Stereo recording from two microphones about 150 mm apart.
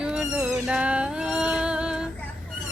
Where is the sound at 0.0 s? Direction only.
5° right (ahead or behind).